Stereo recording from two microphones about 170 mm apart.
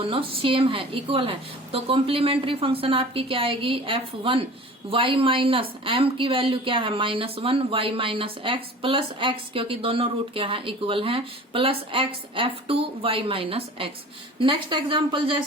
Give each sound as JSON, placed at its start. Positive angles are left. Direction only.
{"t": 0.1, "sound": "a woman's voice", "side_deg": -30}